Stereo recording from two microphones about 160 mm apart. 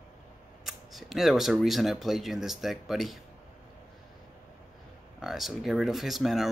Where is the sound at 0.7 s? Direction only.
Centre (ahead or behind).